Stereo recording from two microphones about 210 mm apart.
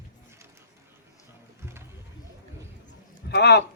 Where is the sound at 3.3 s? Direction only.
50° left (ahead or behind).